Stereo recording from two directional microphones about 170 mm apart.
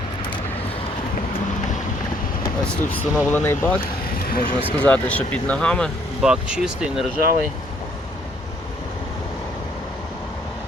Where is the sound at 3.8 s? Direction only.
60° left (ahead or behind).